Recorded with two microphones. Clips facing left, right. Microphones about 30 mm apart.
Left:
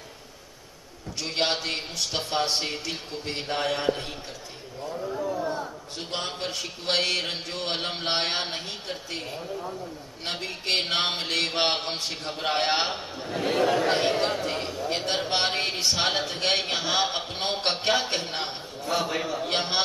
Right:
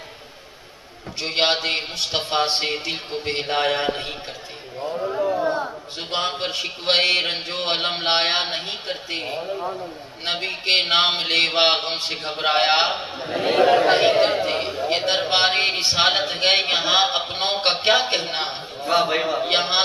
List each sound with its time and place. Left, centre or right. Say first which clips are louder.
1.2 s a man's voice: right 6 dB; right